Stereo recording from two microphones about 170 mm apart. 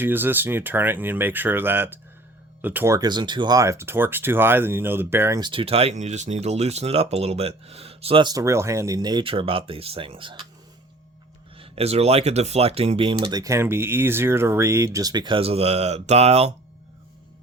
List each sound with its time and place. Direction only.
0.0 s speech: 10° right (ahead or behind)
5.4 s speech: 30° right (ahead or behind)
11.5 s speech: 35° right (ahead or behind)
13.4 s speech: 15° right (ahead or behind); by 16.5 s 40° right (ahead or behind)